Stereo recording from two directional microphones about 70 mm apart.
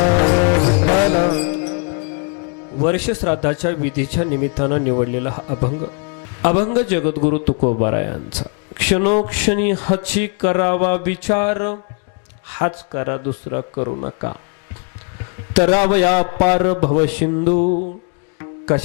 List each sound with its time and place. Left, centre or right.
0.0 s music: centre
2.8 s speech: centre
15.5 s a man's voice: centre
18.3 s music: left